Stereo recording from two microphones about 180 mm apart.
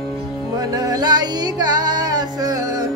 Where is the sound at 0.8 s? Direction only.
20° right (ahead or behind).